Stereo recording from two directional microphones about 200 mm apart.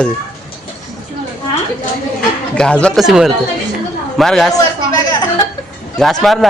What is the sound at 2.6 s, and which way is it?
A man's voice, 5° left (ahead or behind).